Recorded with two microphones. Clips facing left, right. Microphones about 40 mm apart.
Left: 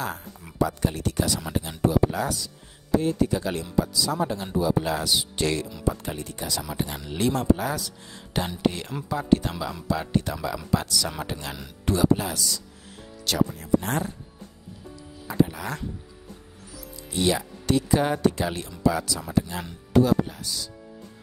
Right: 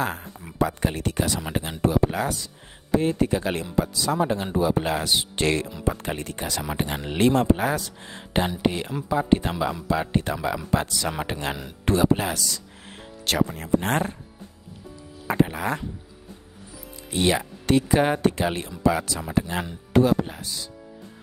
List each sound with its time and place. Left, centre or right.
0.0 s speech: right
8.5 s speech: centre
12.4 s speech: right
15.2 s speech: right
17.1 s speech: right